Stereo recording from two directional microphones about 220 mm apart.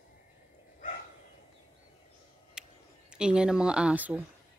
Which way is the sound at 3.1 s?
5° right (ahead or behind).